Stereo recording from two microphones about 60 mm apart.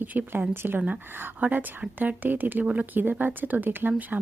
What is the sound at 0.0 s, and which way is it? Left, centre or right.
Speech, right.